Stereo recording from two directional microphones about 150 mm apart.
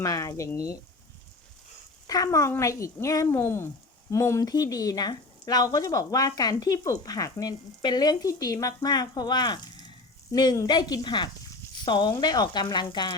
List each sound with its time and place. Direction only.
0.0 s speech: 20° left (ahead or behind)
2.0 s speech: 25° left (ahead or behind)